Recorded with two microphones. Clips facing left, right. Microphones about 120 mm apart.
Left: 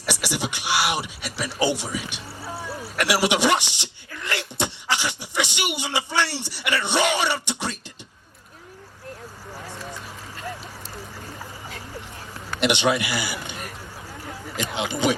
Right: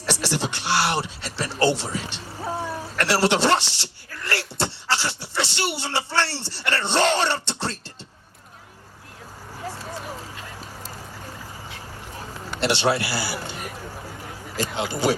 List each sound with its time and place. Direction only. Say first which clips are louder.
0.0 s speech: right 2 dB; 15° left (ahead or behind)
12.5 s speech: left 1 dB; 20° left (ahead or behind)